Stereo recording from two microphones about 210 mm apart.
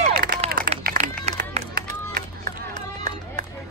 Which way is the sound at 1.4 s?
45° right (ahead or behind).